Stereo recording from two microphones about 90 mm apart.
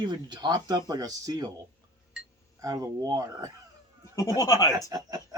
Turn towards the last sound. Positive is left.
turn(degrees=-45)  # may be behind; listen again after turning